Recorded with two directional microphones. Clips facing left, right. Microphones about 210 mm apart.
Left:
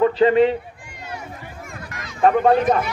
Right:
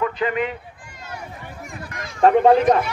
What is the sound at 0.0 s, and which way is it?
Speech, 30° left (ahead or behind).